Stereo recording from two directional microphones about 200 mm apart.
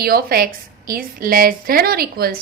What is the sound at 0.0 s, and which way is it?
A woman's voice, 50° right (ahead or behind).